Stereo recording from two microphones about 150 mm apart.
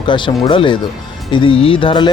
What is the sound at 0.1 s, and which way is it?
Speech, 35° left (ahead or behind).